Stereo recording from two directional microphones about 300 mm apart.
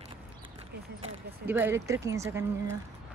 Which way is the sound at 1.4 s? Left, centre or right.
Centre.